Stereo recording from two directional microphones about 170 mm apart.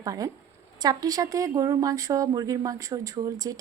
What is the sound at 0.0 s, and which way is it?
A woman's voice, 20° right (ahead or behind).